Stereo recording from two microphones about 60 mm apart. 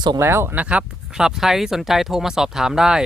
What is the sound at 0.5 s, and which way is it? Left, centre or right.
Speech, centre.